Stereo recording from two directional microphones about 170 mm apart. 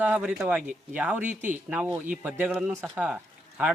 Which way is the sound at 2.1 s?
5° right (ahead or behind).